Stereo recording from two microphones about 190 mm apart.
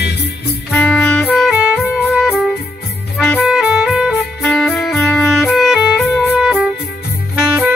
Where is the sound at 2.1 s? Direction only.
Centre (ahead or behind).